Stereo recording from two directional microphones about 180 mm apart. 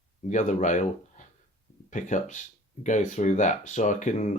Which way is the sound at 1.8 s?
45° left (ahead or behind).